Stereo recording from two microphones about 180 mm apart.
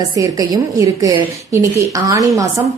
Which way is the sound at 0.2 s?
20° right (ahead or behind).